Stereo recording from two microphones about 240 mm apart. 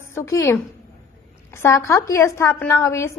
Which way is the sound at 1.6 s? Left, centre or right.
Centre.